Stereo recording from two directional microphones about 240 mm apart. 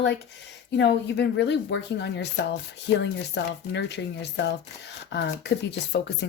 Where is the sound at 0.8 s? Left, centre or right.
Left.